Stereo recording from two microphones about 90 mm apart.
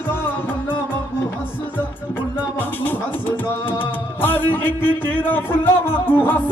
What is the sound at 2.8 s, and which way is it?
Music, 20° left (ahead or behind).